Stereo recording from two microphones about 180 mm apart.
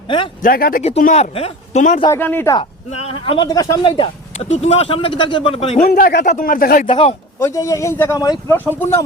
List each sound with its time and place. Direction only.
0.4 s speech: 50° left (ahead or behind)
0.8 s speech: 40° left (ahead or behind)
2.1 s speech: 10° left (ahead or behind)
2.6 s speech: 35° left (ahead or behind)
5.8 s speech: 55° left (ahead or behind)
6.8 s speech: 30° left (ahead or behind)
7.3 s speech: 15° left (ahead or behind)